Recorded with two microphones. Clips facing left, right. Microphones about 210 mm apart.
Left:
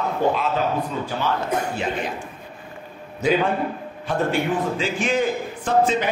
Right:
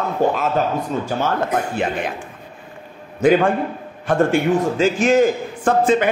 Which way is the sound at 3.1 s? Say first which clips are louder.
Right 5 dB; 50° right (ahead or behind).